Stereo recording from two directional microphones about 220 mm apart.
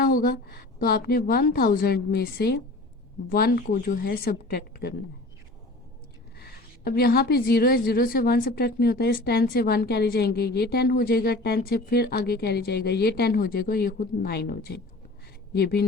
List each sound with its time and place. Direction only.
0.0 s a woman's voice: 40° left (ahead or behind)
6.4 s a woman's voice: 45° left (ahead or behind)